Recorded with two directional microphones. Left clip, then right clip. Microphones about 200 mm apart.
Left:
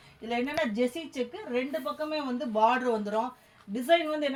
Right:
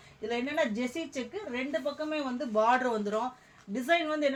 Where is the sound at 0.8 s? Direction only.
15° right (ahead or behind).